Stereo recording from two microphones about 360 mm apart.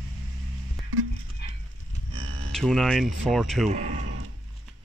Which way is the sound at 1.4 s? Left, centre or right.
Left.